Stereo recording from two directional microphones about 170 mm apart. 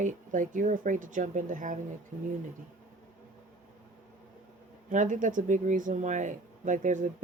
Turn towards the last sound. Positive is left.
turn(degrees=-50)  # may be behind; listen again after turning